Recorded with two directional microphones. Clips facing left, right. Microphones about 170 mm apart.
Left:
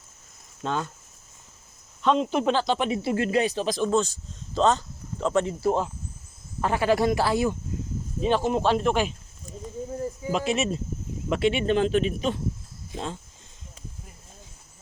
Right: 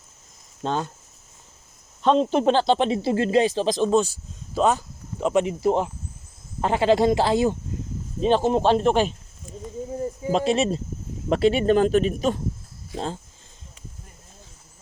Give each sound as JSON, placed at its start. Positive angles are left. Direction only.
{"t": 0.6, "sound": "speech", "side_deg": -30}
{"t": 2.0, "sound": "speech", "side_deg": -30}
{"t": 4.0, "sound": "speech", "side_deg": -10}
{"t": 9.5, "sound": "a sound", "side_deg": 40}
{"t": 10.3, "sound": "speech", "side_deg": -35}